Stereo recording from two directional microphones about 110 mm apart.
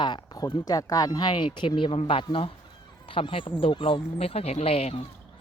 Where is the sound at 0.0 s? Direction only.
40° left (ahead or behind); by 4.9 s 65° left (ahead or behind).